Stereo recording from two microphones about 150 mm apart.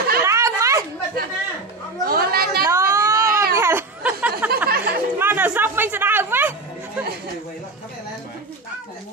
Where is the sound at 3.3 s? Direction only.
80° right.